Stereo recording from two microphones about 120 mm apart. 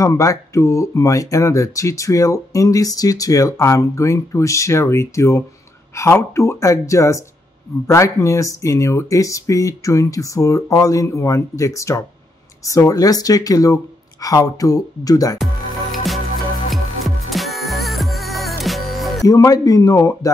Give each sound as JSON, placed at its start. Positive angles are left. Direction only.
{"t": 0.0, "sound": "speech", "side_deg": 30}
{"t": 15.3, "sound": "music", "side_deg": 0}
{"t": 19.2, "sound": "speech", "side_deg": 30}